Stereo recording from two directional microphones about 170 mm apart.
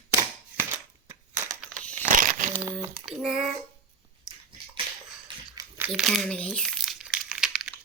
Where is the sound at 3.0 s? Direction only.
5° right (ahead or behind).